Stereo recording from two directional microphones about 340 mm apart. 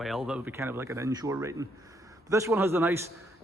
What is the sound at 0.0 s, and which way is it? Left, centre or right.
A man's voice, centre.